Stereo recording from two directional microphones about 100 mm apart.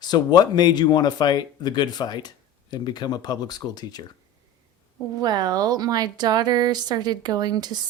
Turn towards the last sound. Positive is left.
turn(degrees=-45)  # may be behind; listen again after turning